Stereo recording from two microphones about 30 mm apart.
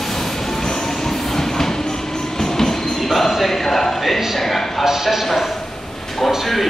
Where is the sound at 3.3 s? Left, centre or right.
Centre.